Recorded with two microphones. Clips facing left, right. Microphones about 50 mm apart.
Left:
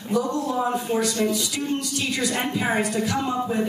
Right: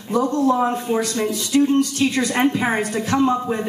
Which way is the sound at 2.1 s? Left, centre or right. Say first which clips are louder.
Right 5 dB; right.